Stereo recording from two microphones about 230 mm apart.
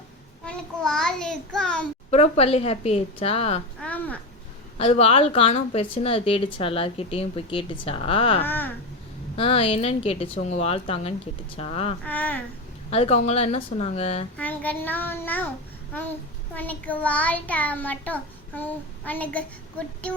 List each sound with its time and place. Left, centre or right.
0.4 s a child's voice: centre
2.0 s a woman's voice: left
3.8 s a sound: centre
4.8 s a woman's voice: left
8.4 s a child's voice: centre
9.3 s a woman's voice: left
12.0 s a child's voice: centre
12.9 s a woman's voice: left
14.3 s a child's voice: centre
16.6 s a child's voice: centre